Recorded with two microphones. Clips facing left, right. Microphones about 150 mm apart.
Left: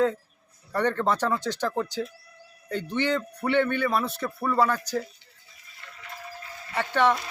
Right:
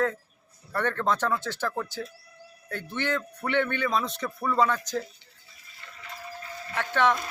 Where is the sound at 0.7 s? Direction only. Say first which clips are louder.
Left 2 dB; 15° left (ahead or behind).